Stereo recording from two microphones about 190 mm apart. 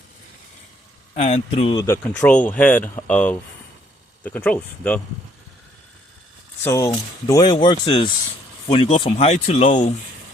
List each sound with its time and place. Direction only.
1.1 s speech: 35° left (ahead or behind)
1.9 s speech: 10° left (ahead or behind)
6.7 s speech: 15° left (ahead or behind); by 9.9 s 40° left (ahead or behind)